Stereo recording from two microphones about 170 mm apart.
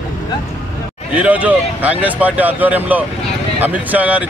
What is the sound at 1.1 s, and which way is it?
Speech, 10° right (ahead or behind).